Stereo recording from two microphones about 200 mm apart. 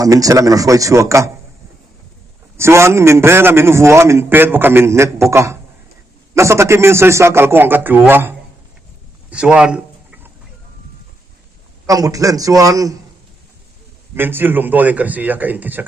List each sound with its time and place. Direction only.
0.0 s a man's voice: 15° right (ahead or behind)
2.6 s a man's voice: 15° right (ahead or behind)
11.9 s a man's voice: 15° right (ahead or behind)
14.2 s a man's voice: 10° right (ahead or behind)